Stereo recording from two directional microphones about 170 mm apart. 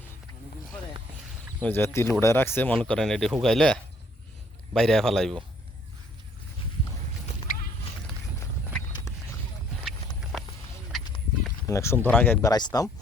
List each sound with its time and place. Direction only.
1.6 s speech: 15° left (ahead or behind)
8.4 s clip-clop: 20° left (ahead or behind)
10.3 s duck: centre (ahead or behind)
11.6 s speech: 15° left (ahead or behind)